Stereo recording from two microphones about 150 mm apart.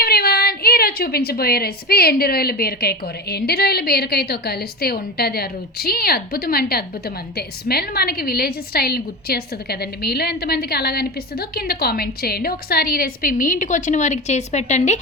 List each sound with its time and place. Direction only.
0.0 s a woman's voice: 90° left; by 14.9 s 50° left (ahead or behind)